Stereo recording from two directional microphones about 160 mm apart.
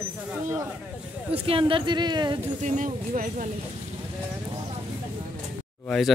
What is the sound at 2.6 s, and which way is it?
Speech, 50° right (ahead or behind).